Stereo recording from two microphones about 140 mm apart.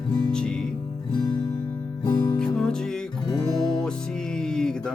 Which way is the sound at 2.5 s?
5° left (ahead or behind).